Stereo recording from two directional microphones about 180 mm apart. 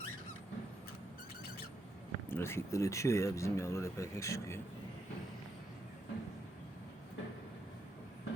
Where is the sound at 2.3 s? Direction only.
15° left (ahead or behind).